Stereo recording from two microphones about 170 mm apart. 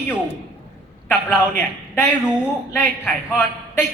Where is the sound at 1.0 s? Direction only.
10° left (ahead or behind).